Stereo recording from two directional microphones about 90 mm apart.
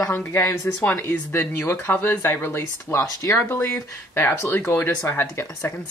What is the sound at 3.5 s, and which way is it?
Speech, 25° left (ahead or behind).